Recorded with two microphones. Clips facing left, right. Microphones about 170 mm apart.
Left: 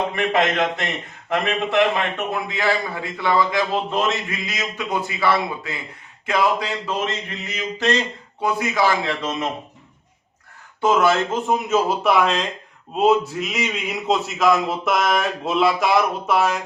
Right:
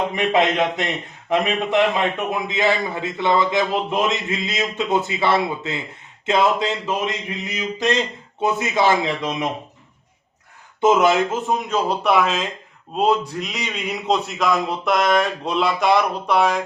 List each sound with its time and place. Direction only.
0.2 s a man's voice: 20° right (ahead or behind)
10.8 s speech: 20° right (ahead or behind)
11.3 s a man's voice: centre (ahead or behind)